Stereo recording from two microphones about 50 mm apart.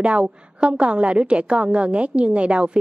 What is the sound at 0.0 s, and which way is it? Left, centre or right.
A woman's voice, right.